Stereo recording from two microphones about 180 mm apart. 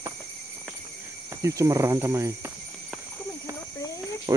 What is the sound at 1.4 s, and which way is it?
Speech, 15° right (ahead or behind).